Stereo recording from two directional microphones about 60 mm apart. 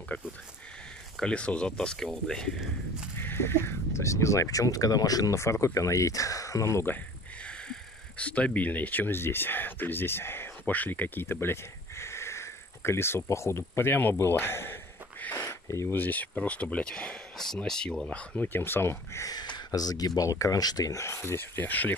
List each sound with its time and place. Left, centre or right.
0.1 s speech: left
1.2 s speech: centre
3.2 s speech: left
5.4 s speech: left
7.4 s speech: centre; by 10.7 s left
10.7 s speech: left
12.0 s speech: left
15.4 s a sound: left
15.9 s speech: left
19.2 s speech: left
21.0 s speech: left